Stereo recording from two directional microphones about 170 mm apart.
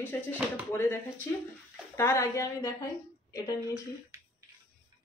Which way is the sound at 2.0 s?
15° left (ahead or behind).